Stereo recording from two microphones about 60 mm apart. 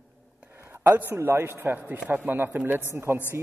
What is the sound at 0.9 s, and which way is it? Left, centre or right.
Speech, right.